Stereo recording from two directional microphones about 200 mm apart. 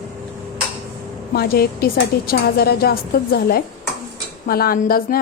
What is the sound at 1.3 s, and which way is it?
A woman's voice, 50° left (ahead or behind).